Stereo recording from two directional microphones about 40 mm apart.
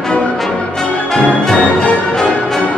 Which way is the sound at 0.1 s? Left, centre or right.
Left.